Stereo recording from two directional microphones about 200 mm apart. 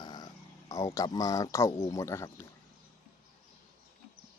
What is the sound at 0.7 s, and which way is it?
Speech, 15° left (ahead or behind).